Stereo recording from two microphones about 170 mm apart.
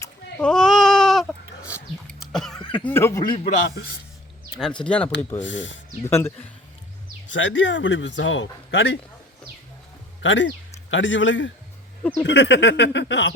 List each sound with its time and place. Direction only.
0.3 s bleat: 5° left (ahead or behind)
2.2 s cough: centre (ahead or behind)
2.8 s speech: 15° left (ahead or behind)
4.5 s speech: 5° left (ahead or behind)
5.4 s speech: 90° left
6.1 s speech: 15° left (ahead or behind)
7.3 s speech: 90° left
10.2 s speech: 90° left